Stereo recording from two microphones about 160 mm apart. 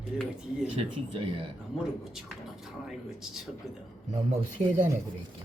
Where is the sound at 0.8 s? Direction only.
35° right (ahead or behind).